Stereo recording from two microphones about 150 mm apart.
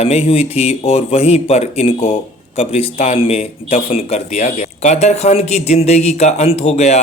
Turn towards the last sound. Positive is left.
turn(degrees=45)  # may be behind; listen again after turning